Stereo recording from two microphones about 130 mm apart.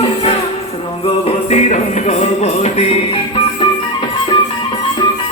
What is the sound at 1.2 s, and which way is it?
Music, 60° left (ahead or behind).